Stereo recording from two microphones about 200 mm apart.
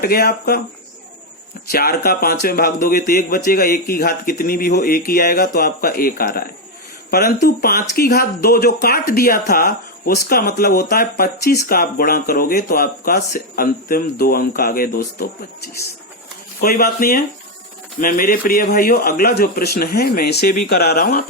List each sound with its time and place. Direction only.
0.0 s speech: 50° left (ahead or behind)
1.7 s speech: 50° left (ahead or behind)